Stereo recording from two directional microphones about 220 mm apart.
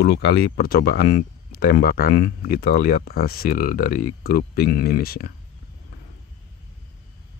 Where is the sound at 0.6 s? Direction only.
40° left (ahead or behind).